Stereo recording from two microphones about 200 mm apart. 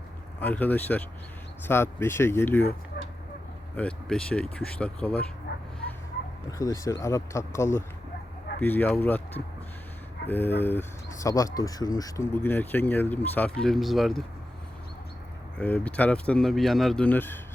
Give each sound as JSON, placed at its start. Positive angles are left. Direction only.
{"t": 0.3, "sound": "speech", "side_deg": 10}
{"t": 3.8, "sound": "speech", "side_deg": 5}
{"t": 6.6, "sound": "speech", "side_deg": 15}
{"t": 10.2, "sound": "speech", "side_deg": 10}
{"t": 15.5, "sound": "speech", "side_deg": 5}